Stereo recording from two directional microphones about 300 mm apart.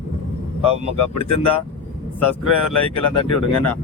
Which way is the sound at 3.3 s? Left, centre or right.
Left.